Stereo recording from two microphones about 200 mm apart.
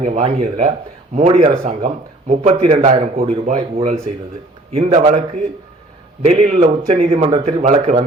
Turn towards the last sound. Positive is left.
turn(degrees=-35)  # may be behind; listen again after turning